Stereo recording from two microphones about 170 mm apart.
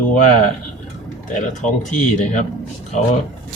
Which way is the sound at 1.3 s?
45° left (ahead or behind).